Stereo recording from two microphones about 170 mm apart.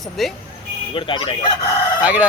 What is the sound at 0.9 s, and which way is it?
Speech, 30° left (ahead or behind).